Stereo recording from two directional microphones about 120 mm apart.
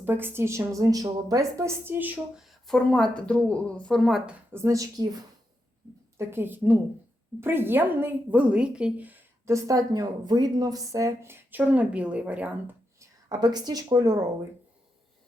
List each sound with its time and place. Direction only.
0.0 s a woman's voice: 20° right (ahead or behind); by 4.2 s centre (ahead or behind)
4.5 s speech: 25° right (ahead or behind)
6.1 s a woman's voice: 20° right (ahead or behind)
9.5 s speech: 25° right (ahead or behind); by 12.7 s 10° right (ahead or behind)
13.0 s speech: 35° right (ahead or behind)